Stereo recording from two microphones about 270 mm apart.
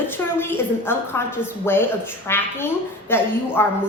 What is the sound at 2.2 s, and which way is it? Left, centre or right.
A woman's voice, centre.